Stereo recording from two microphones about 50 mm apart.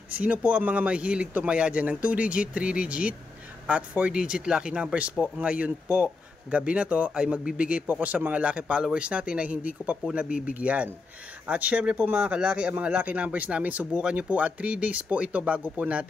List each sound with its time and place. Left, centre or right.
0.1 s speech: right